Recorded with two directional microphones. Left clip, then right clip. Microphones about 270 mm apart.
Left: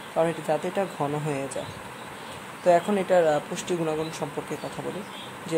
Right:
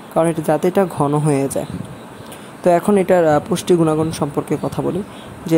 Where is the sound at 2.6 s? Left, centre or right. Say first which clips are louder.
Right 7 dB; right.